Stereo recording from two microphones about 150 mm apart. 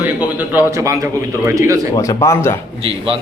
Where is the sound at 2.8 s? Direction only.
40° right (ahead or behind).